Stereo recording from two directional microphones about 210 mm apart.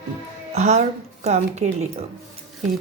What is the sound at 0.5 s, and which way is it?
A woman's voice, 30° right (ahead or behind).